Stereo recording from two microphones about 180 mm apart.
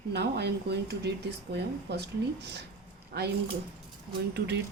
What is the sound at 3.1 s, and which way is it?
Speech, 65° right (ahead or behind).